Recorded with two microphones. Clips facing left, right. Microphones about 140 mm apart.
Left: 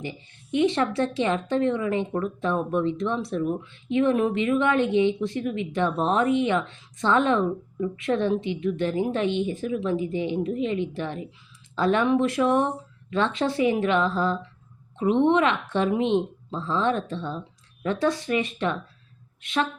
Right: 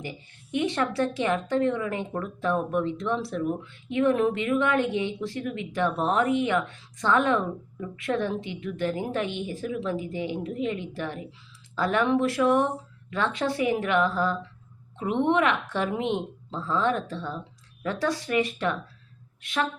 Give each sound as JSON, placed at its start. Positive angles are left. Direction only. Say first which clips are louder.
{"t": 0.0, "sound": "a woman's voice", "louder": "left 3 dB", "side_deg": 20}